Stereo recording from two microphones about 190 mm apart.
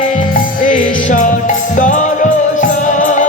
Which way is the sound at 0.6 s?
45° left (ahead or behind).